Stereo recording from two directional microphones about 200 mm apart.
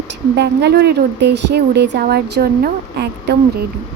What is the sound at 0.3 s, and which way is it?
Speech, 55° right (ahead or behind).